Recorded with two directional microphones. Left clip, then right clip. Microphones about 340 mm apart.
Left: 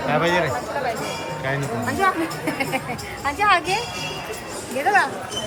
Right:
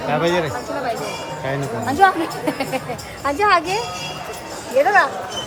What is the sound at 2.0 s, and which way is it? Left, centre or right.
Speech, right.